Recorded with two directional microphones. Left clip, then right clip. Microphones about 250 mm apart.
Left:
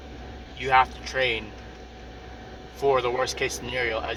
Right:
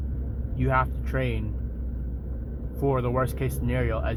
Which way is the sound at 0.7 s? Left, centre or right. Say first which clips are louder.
Left 6 dB; centre.